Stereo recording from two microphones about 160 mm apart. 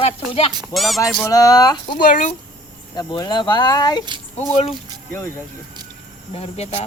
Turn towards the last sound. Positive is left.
turn(degrees=40)  # may be behind; listen again after turning